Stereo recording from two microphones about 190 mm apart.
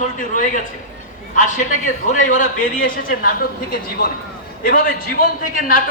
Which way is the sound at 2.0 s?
45° left (ahead or behind).